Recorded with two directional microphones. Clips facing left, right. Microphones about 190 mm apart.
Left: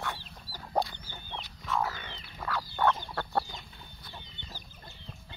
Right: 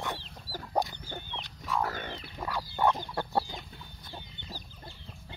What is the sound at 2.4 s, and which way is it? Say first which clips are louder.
Fowl: even; 15° right (ahead or behind).